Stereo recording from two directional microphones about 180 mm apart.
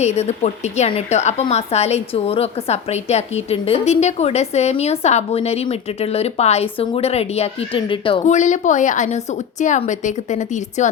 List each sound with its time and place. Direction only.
0.0 s a woman's voice: 40° left (ahead or behind)
8.2 s a woman's voice: 40° left (ahead or behind)